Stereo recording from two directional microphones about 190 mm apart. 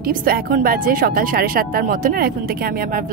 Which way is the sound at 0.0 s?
50° right (ahead or behind).